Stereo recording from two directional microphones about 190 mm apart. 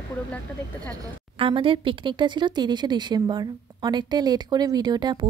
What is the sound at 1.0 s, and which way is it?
A woman's voice, 25° right (ahead or behind).